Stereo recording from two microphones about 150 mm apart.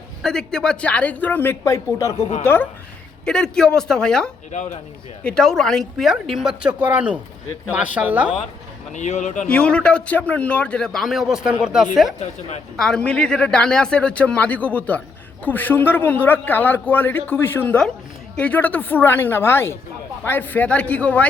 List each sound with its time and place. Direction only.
0.2 s a man's voice: 5° left (ahead or behind)
3.2 s a woman's voice: 5° left (ahead or behind)
4.5 s speech: 50° left (ahead or behind)
5.2 s a woman's voice: 5° left (ahead or behind)
8.9 s speech: 50° left (ahead or behind)
9.5 s a man's voice: 5° left (ahead or behind)
12.2 s speech: 50° left (ahead or behind)
12.7 s a man's voice: 5° left (ahead or behind)